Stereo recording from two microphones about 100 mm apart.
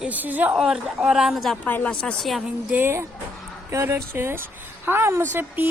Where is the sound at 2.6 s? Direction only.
20° right (ahead or behind).